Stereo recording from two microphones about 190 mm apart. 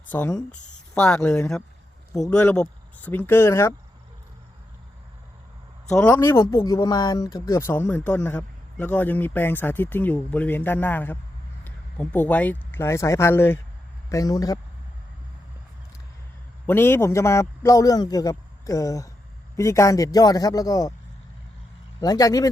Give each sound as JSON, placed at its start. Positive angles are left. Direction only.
{"t": 0.1, "sound": "speech", "side_deg": 10}
{"t": 5.9, "sound": "a man's voice", "side_deg": 5}
{"t": 16.6, "sound": "a man's voice", "side_deg": 10}
{"t": 22.0, "sound": "a man's voice", "side_deg": 20}